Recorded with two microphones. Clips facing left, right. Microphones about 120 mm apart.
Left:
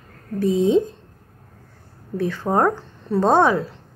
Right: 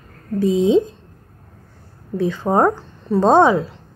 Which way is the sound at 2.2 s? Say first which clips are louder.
Right 3 dB; 20° right (ahead or behind).